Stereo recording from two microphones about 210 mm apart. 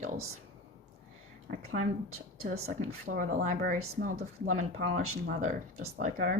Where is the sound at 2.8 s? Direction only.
40° right (ahead or behind).